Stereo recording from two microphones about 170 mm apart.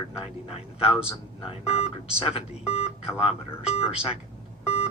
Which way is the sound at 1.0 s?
35° left (ahead or behind).